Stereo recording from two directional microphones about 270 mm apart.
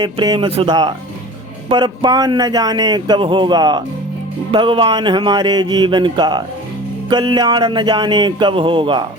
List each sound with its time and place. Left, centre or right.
0.0 s a man's voice: centre